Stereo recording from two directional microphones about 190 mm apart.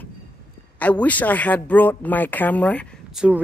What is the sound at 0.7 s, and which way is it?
Speech, 5° left (ahead or behind).